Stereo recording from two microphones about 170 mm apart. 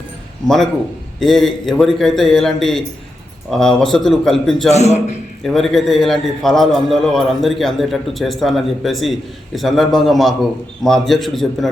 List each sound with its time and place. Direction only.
0.4 s a man's voice: centre (ahead or behind)
4.7 s a man's voice: 40° left (ahead or behind)
5.4 s a man's voice: centre (ahead or behind)